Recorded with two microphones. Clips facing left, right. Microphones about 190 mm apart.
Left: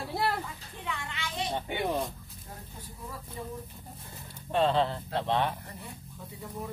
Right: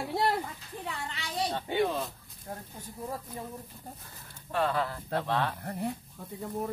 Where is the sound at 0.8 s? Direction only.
35° right (ahead or behind).